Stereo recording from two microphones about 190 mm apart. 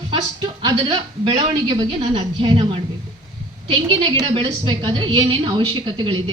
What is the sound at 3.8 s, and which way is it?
A woman's voice, 25° right (ahead or behind).